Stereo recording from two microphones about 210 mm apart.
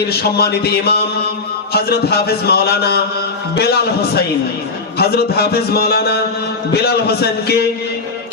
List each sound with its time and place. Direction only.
0.1 s speech: 50° left (ahead or behind)
4.9 s speech: 50° left (ahead or behind)